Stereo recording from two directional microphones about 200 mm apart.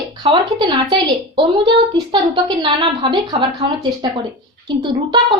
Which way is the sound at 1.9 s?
25° right (ahead or behind).